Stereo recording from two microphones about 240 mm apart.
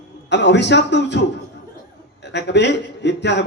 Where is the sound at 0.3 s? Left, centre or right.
Left.